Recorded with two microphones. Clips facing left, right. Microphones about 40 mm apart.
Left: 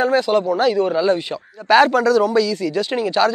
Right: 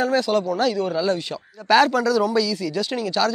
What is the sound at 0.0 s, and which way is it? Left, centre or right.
Speech, centre.